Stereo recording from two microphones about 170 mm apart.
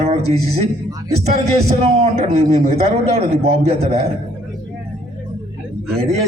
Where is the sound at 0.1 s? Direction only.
40° right (ahead or behind).